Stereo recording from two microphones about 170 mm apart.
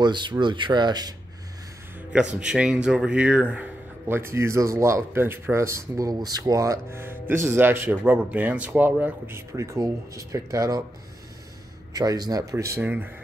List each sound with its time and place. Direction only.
0.0 s speech: 25° right (ahead or behind)
2.3 s speech: 5° right (ahead or behind); by 10.8 s 20° right (ahead or behind)
11.9 s speech: 20° right (ahead or behind)